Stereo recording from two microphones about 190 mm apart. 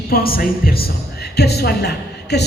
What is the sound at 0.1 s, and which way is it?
A woman's voice, 50° left (ahead or behind).